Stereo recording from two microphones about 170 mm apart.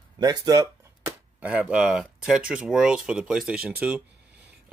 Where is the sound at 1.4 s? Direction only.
5° right (ahead or behind).